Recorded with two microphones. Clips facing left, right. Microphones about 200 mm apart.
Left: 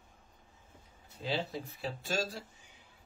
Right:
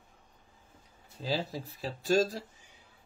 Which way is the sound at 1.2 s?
35° right (ahead or behind).